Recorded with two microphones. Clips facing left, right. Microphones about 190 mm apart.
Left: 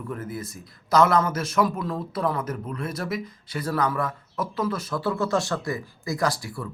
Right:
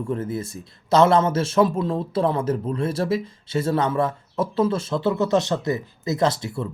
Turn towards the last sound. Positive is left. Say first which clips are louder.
# right 5 dB
turn(degrees=-25)  # may be behind; listen again after turning